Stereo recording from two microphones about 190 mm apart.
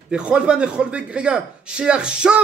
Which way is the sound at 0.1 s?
5° right (ahead or behind).